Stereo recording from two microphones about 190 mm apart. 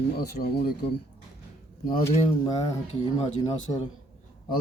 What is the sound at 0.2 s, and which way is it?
Speech, 55° left (ahead or behind).